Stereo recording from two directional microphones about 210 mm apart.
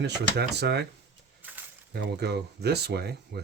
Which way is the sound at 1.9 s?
50° right (ahead or behind).